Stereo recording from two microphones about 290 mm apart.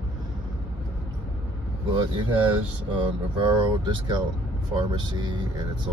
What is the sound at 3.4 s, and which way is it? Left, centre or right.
Speech, centre.